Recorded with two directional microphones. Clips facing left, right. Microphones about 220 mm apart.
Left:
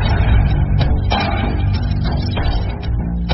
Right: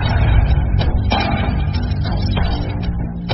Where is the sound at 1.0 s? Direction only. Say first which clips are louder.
Right 3 dB; centre (ahead or behind).